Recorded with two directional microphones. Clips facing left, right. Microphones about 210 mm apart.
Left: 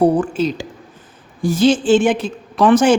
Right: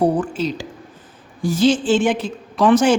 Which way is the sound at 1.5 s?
55° left (ahead or behind).